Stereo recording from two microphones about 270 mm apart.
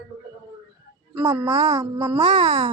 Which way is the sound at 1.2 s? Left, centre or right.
Centre.